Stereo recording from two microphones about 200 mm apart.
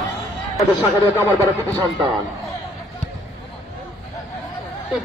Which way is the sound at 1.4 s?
15° right (ahead or behind).